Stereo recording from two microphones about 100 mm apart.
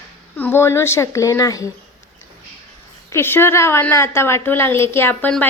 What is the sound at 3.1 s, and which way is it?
A woman's voice, 25° left (ahead or behind).